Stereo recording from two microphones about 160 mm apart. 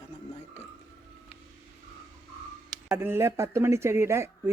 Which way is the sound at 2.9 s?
15° right (ahead or behind).